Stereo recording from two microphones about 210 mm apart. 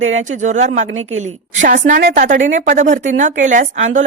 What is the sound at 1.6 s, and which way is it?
Speech, 35° right (ahead or behind).